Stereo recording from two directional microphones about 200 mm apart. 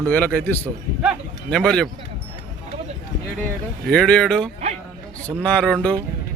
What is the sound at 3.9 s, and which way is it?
Speech, 5° left (ahead or behind).